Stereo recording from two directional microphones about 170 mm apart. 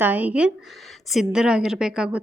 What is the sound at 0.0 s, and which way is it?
A woman's voice, 10° right (ahead or behind).